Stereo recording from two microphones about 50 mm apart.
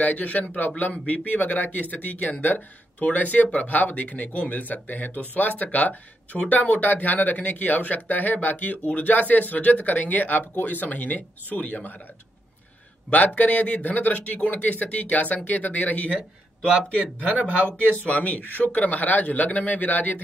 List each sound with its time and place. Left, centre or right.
0.0 s speech: left
13.1 s speech: left
16.1 s speech: right
17.9 s speech: left